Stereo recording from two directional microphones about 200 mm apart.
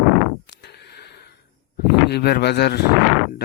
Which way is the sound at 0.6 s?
55° left (ahead or behind).